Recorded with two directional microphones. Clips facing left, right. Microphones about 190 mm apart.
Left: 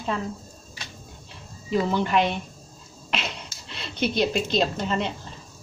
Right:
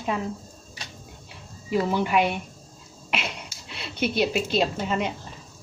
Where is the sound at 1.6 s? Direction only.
10° right (ahead or behind).